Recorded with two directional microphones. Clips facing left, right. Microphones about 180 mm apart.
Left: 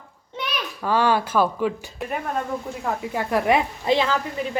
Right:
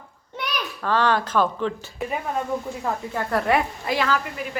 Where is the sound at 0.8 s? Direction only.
10° left (ahead or behind).